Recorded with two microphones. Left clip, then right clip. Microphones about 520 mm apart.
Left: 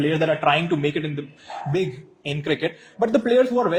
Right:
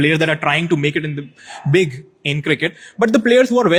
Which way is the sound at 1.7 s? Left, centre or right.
Right.